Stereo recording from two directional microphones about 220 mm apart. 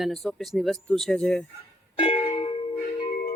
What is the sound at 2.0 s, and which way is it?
Music, 20° left (ahead or behind).